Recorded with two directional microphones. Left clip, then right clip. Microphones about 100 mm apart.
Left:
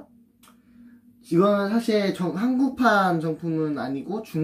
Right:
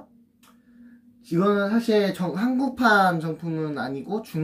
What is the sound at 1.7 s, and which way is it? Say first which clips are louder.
Speech: right 1 dB; 15° right (ahead or behind).